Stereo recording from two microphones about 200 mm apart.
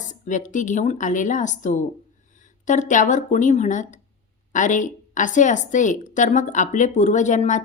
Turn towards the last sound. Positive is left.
turn(degrees=35)  # may be behind; listen again after turning